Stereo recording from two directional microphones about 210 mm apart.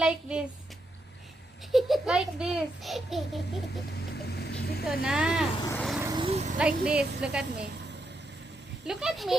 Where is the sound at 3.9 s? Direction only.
50° left (ahead or behind).